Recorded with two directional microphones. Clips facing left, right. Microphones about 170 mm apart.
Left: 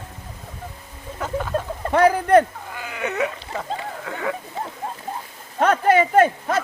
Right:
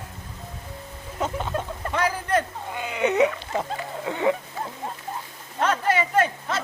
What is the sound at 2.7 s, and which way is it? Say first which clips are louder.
Dog: right 4 dB; 20° right (ahead or behind).